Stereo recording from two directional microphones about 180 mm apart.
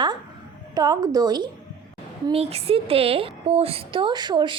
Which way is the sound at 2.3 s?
35° right (ahead or behind).